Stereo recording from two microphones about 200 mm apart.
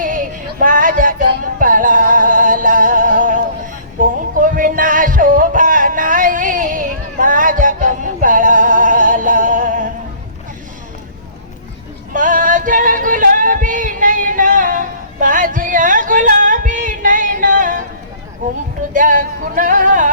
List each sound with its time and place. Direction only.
0.0 s music: 40° right (ahead or behind)
12.1 s music: 40° right (ahead or behind)
18.9 s a sound: 40° right (ahead or behind)